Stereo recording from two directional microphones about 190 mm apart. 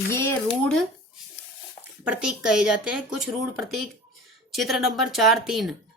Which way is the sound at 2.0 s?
5° right (ahead or behind).